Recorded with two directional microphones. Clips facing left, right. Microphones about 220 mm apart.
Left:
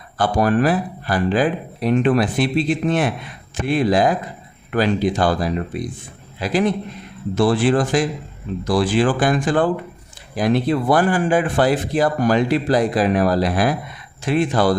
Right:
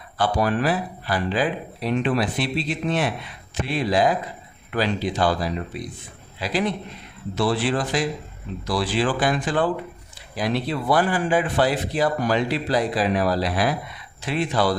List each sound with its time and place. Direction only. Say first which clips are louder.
0.2 s speech: left 5 dB; 50° left (ahead or behind)